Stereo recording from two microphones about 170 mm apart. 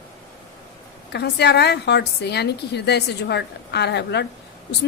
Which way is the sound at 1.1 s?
75° left (ahead or behind).